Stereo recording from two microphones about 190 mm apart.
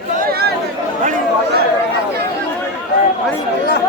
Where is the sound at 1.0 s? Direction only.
45° right (ahead or behind).